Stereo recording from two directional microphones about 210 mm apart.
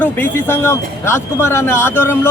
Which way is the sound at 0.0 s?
10° left (ahead or behind).